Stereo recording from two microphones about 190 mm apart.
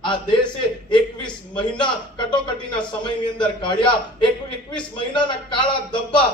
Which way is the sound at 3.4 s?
25° left (ahead or behind).